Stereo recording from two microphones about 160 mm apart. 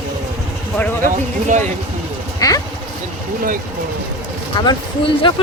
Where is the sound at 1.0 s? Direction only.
50° right (ahead or behind).